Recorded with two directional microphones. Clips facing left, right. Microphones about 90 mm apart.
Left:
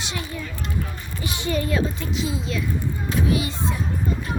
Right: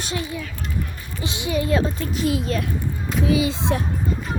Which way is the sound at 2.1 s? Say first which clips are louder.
Right 7 dB; 60° right (ahead or behind).